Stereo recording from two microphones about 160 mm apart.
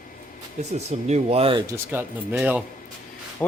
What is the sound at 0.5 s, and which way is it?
Speech, 40° right (ahead or behind).